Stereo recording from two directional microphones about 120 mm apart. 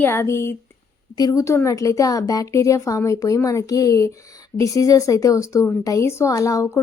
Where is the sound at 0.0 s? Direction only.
20° left (ahead or behind).